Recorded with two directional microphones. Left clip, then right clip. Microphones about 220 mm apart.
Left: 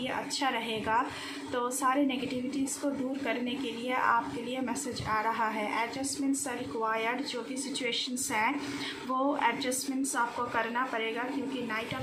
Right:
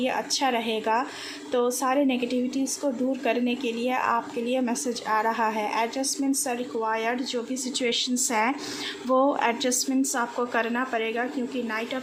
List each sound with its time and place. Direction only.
0.0 s a woman's voice: 45° right (ahead or behind)